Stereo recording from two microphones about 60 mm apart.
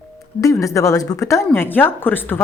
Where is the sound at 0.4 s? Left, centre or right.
Left.